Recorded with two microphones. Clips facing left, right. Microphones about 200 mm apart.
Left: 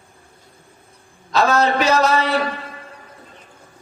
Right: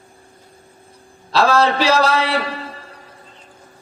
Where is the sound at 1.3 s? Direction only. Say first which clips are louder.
Right 1 dB; 30° right (ahead or behind).